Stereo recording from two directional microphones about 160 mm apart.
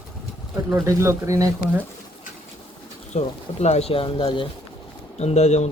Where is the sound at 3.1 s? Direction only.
45° left (ahead or behind).